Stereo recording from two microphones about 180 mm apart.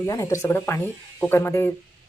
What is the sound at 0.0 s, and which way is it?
Speech, 15° left (ahead or behind).